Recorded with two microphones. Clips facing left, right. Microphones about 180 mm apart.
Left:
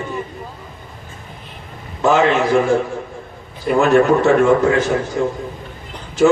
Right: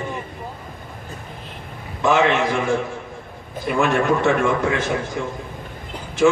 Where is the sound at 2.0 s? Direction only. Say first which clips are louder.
Left 3 dB; 40° left (ahead or behind).